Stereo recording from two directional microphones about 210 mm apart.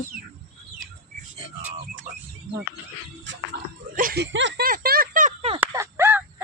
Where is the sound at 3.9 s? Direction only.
45° right (ahead or behind).